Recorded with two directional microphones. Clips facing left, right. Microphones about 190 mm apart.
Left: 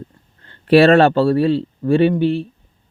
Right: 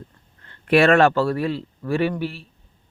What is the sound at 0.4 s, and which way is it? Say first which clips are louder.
Speech: left 6 dB; 30° left (ahead or behind).